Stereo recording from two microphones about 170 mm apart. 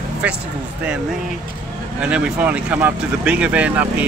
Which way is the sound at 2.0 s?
5° right (ahead or behind).